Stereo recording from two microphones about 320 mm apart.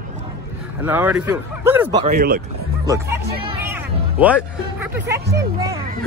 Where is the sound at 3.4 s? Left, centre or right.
Centre.